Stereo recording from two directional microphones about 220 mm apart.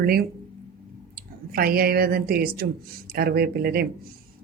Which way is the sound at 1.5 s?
40° right (ahead or behind).